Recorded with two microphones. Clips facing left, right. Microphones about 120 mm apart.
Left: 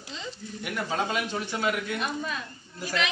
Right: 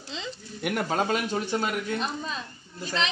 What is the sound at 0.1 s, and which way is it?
Speech, 75° right (ahead or behind).